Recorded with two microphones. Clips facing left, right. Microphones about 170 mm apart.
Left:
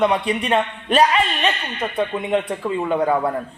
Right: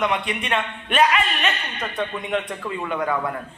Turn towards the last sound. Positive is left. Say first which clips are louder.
# left 5 dB
turn(degrees=30)  # may be behind; listen again after turning